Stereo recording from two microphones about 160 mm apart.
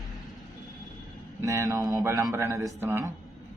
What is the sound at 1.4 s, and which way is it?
A man's voice, 20° right (ahead or behind).